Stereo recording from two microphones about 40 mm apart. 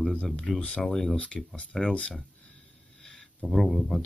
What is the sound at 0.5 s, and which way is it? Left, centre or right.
Speech, left.